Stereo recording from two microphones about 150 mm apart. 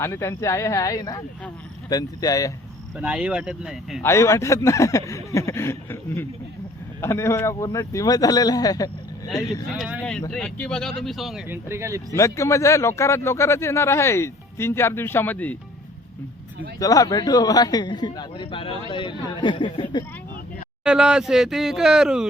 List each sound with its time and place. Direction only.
0.0 s speech: 20° left (ahead or behind)
3.0 s speech: 5° right (ahead or behind)
4.0 s speech: 20° left (ahead or behind)
9.7 s speech: 5° right (ahead or behind)
10.0 s speech: 5° left (ahead or behind)
11.4 s speech: 15° right (ahead or behind)
12.1 s a man's voice: 20° left (ahead or behind)
16.8 s speech: 25° left (ahead or behind)
20.8 s speech: 5° right (ahead or behind)